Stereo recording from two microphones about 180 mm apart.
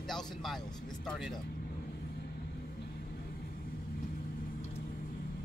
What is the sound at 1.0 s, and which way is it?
Speech, centre (ahead or behind).